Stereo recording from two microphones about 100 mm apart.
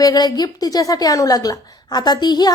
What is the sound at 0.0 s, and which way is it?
A woman's voice, 40° left (ahead or behind).